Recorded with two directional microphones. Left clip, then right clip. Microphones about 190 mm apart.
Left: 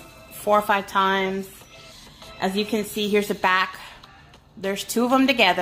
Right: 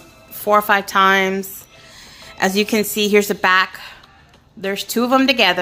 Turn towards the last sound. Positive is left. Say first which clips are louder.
# right 4 dB
turn(degrees=-20)  # may be behind; listen again after turning